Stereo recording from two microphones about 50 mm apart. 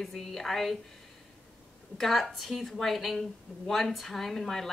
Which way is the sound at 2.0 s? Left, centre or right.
Centre.